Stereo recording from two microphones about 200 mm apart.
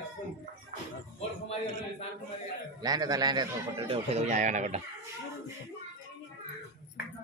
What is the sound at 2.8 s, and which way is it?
A man's voice, 20° right (ahead or behind).